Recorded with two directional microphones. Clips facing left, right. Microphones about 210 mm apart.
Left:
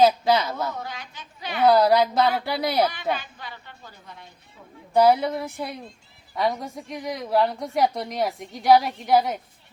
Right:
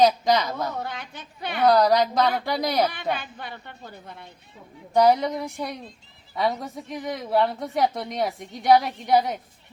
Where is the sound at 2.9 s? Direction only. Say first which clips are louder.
Left 1 dB; 55° right (ahead or behind).